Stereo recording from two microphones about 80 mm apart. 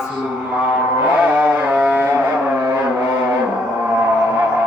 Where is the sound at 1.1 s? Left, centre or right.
Centre.